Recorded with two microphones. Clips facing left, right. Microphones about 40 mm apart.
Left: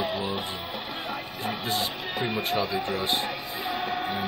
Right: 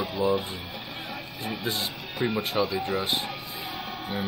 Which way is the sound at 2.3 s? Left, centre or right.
Centre.